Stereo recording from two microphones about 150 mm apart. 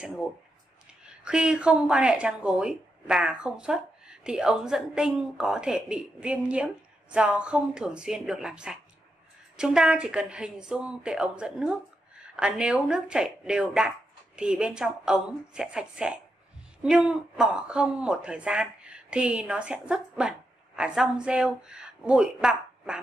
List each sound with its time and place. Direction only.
1.0 s a woman's voice: 5° right (ahead or behind)